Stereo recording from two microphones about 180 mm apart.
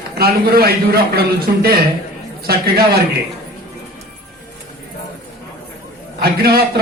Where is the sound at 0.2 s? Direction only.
60° right (ahead or behind).